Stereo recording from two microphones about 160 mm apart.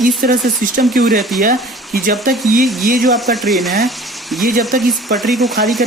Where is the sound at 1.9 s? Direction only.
65° right (ahead or behind).